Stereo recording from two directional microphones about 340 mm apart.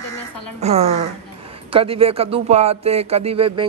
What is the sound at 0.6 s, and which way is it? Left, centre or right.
A woman's voice, centre.